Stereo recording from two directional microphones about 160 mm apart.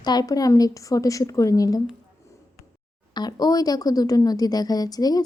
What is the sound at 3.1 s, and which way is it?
A woman's voice, 25° left (ahead or behind).